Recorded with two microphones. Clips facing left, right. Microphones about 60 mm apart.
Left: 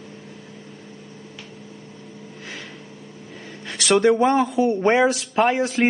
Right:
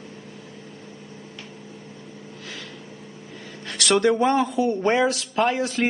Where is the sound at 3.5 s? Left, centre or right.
Centre.